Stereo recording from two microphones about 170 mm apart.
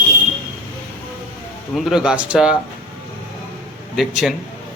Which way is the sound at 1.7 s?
Centre (ahead or behind).